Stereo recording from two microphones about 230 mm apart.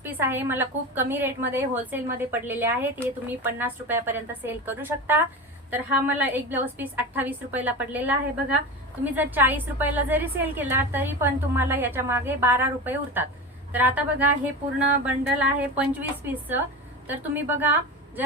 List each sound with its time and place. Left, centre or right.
0.0 s a woman's voice: centre